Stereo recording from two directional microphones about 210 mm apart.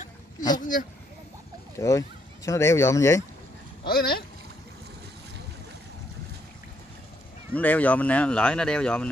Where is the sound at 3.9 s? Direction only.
45° left (ahead or behind).